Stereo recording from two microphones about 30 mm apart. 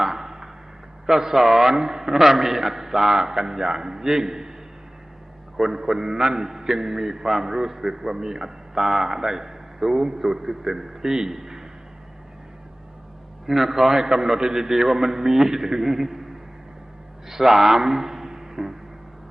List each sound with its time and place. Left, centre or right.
0.1 s arrow: centre
1.0 s a man's voice: centre
5.5 s a man's voice: centre
13.5 s a man's voice: centre
17.2 s a man's voice: centre